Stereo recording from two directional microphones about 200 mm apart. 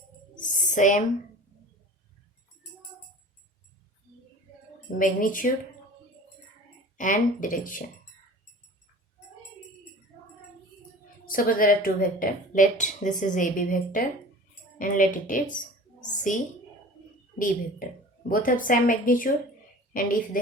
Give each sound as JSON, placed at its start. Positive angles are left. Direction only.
{"t": 0.3, "sound": "a sound", "side_deg": 40}
{"t": 4.9, "sound": "a woman's voice", "side_deg": 40}
{"t": 6.9, "sound": "speech", "side_deg": 40}
{"t": 11.3, "sound": "a woman's voice", "side_deg": 45}